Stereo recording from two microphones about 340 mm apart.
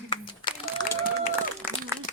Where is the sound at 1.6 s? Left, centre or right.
Centre.